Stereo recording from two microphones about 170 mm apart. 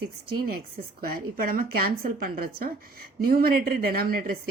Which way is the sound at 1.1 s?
60° right (ahead or behind).